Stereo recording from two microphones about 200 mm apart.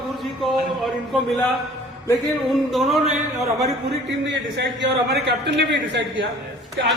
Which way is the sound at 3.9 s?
60° right (ahead or behind).